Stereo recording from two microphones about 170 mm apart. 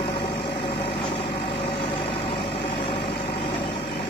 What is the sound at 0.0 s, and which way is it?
Vehicle, 30° left (ahead or behind).